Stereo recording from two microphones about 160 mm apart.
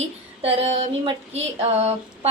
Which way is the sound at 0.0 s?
40° right (ahead or behind).